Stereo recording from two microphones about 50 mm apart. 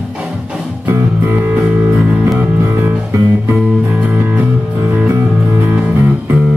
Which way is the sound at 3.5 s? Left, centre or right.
Centre.